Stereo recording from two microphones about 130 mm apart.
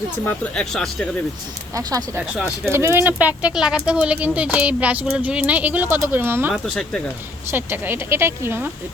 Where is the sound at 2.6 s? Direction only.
20° right (ahead or behind).